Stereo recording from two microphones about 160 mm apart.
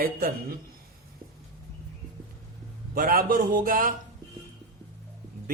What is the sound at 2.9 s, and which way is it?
Speech, 60° right (ahead or behind).